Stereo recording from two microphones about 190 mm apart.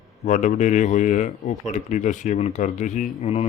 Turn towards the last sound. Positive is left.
turn(degrees=35)  # may be behind; listen again after turning